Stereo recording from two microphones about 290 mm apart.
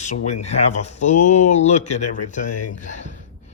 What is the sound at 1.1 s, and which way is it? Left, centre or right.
Speech, left.